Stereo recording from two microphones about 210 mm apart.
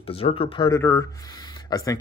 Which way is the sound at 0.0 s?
25° left (ahead or behind).